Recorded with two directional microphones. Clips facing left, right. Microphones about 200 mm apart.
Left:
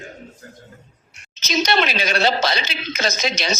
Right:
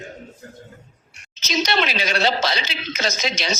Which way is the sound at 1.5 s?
50° left (ahead or behind).